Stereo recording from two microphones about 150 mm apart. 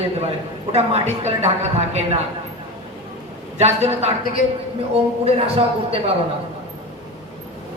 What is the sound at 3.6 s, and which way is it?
Speech, 45° right (ahead or behind).